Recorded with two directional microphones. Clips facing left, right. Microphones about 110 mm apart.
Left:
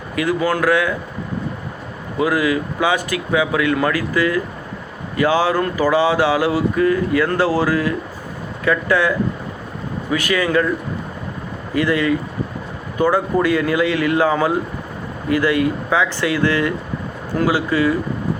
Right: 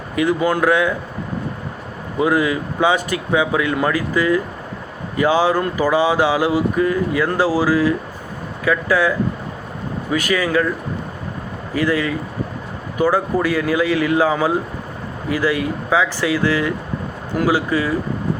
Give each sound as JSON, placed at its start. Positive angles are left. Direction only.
{"t": 0.2, "sound": "speech", "side_deg": -20}
{"t": 2.1, "sound": "speech", "side_deg": -20}
{"t": 11.8, "sound": "speech", "side_deg": -10}